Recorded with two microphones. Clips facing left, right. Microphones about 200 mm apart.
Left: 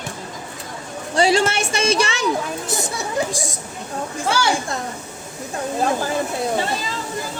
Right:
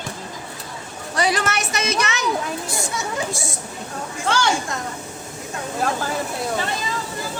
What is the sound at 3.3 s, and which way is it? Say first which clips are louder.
Speech: left 1 dB; 15° left (ahead or behind).